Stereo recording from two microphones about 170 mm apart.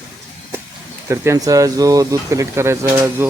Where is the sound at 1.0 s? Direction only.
15° right (ahead or behind).